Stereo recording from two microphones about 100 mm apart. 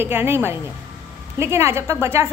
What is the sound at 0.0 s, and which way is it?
A woman's voice, 20° right (ahead or behind).